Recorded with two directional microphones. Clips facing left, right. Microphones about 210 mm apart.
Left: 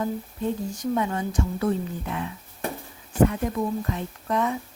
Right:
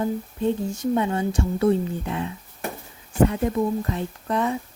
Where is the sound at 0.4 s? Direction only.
25° right (ahead or behind).